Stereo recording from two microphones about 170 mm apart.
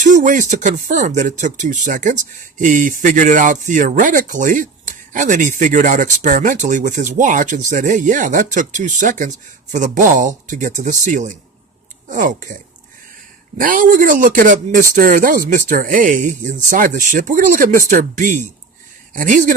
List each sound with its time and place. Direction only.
0.0 s speech: 50° right (ahead or behind)
13.6 s speech: 55° right (ahead or behind)